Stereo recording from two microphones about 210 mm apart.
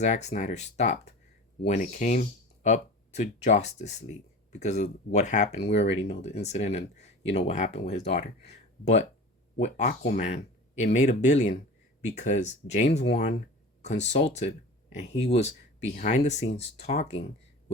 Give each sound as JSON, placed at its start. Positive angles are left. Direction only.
{"t": 0.0, "sound": "speech", "side_deg": 35}